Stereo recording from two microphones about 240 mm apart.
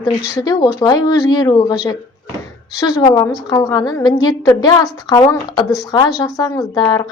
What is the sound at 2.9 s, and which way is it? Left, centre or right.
A woman's voice, centre.